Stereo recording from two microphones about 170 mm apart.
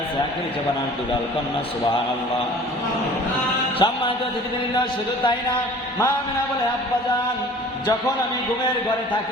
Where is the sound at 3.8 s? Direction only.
25° left (ahead or behind).